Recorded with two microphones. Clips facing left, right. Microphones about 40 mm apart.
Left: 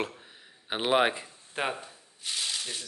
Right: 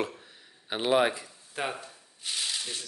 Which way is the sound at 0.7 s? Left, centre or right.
Centre.